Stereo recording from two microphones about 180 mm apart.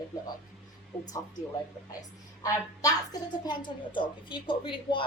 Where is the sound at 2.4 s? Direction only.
20° left (ahead or behind).